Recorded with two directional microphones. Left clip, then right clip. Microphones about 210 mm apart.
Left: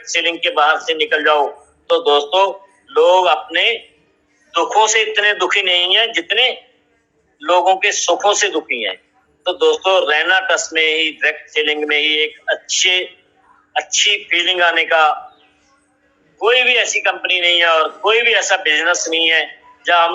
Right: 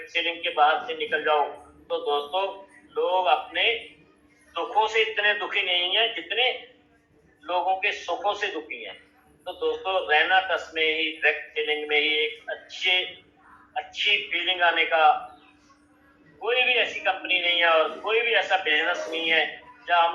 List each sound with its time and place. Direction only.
0.0 s a man's voice: 45° left (ahead or behind)
16.4 s a man's voice: 45° left (ahead or behind)